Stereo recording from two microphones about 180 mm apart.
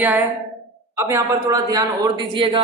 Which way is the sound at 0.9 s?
15° right (ahead or behind).